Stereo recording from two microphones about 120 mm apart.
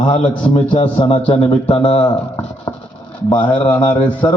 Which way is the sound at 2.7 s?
40° left (ahead or behind).